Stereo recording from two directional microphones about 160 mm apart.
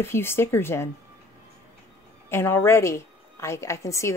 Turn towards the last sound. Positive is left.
turn(degrees=20)  # may be behind; listen again after turning